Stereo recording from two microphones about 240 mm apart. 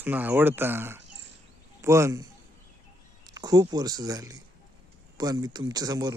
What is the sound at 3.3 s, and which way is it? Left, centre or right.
Speech, centre.